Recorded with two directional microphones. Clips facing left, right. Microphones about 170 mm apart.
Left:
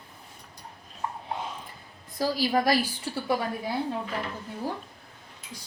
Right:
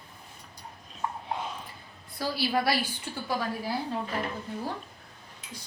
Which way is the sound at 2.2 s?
40° left (ahead or behind).